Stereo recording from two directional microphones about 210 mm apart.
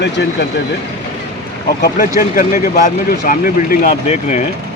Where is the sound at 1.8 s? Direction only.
40° left (ahead or behind).